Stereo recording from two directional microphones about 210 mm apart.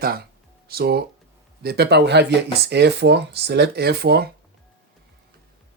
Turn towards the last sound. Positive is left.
turn(degrees=-50)  # may be behind; listen again after turning